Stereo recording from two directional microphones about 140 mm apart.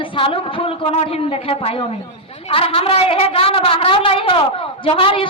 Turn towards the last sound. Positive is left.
turn(degrees=40)  # may be behind; listen again after turning